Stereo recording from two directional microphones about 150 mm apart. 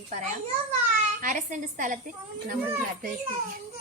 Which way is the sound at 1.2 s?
60° right (ahead or behind).